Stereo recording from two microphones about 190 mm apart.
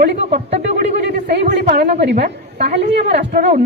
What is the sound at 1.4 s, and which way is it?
Speech, 65° right (ahead or behind).